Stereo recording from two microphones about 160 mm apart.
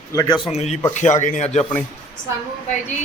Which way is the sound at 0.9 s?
50° left (ahead or behind).